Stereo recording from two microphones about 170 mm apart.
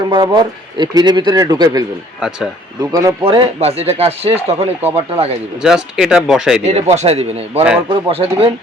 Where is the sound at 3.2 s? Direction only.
35° right (ahead or behind).